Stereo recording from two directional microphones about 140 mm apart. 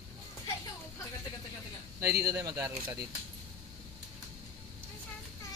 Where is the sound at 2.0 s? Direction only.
20° right (ahead or behind).